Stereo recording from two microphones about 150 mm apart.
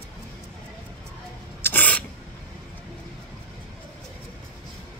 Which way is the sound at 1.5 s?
15° left (ahead or behind).